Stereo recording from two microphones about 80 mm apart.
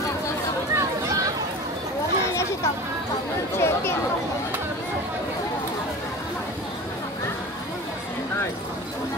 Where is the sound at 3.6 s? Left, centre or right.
Left.